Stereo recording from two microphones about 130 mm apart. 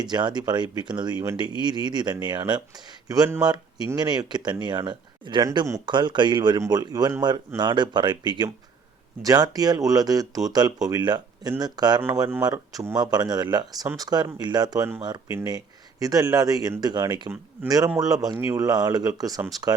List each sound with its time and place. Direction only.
0.0 s speech: 35° right (ahead or behind)